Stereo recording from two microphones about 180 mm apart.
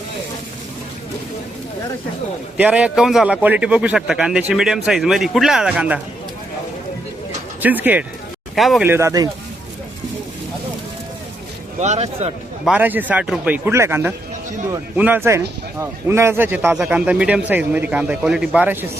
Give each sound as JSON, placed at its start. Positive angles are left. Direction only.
{"t": 2.6, "sound": "a man's voice", "side_deg": -5}
{"t": 7.6, "sound": "a man's voice", "side_deg": -10}
{"t": 8.9, "sound": "a man's voice", "side_deg": -15}
{"t": 11.8, "sound": "speech", "side_deg": -40}
{"t": 12.6, "sound": "a man's voice", "side_deg": -10}